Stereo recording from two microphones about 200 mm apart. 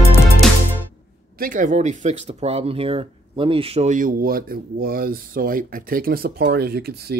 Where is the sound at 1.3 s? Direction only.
45° right (ahead or behind).